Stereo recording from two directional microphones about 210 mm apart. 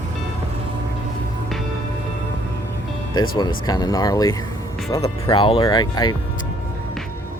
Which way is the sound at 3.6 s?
20° left (ahead or behind).